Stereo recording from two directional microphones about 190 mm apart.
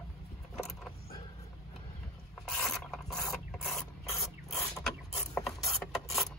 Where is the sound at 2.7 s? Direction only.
Centre (ahead or behind).